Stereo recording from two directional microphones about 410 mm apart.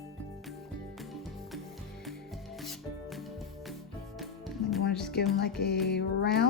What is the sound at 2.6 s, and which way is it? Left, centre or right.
Music, centre.